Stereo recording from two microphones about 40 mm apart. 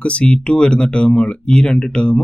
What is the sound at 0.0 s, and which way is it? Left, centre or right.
Speech, left.